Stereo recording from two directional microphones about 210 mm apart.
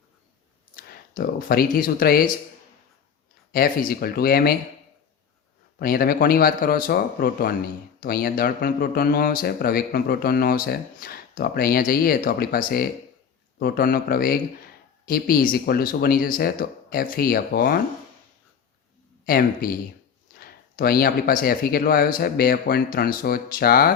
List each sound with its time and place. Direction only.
1.1 s speech: 45° left (ahead or behind)
3.5 s speech: 45° left (ahead or behind)
5.8 s speech: 45° left (ahead or behind)
19.2 s speech: 45° left (ahead or behind)